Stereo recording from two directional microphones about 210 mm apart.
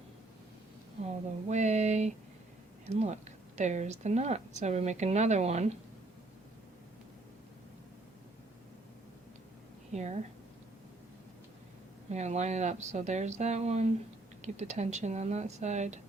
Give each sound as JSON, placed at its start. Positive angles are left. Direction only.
{"t": 1.0, "sound": "a woman's voice", "side_deg": -35}
{"t": 9.9, "sound": "a woman's voice", "side_deg": -35}
{"t": 12.0, "sound": "a woman's voice", "side_deg": -30}